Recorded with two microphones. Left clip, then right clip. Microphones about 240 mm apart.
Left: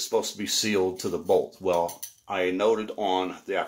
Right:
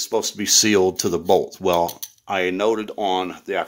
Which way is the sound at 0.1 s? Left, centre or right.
Right.